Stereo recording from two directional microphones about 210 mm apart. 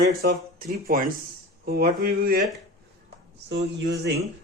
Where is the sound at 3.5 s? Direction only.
60° right (ahead or behind).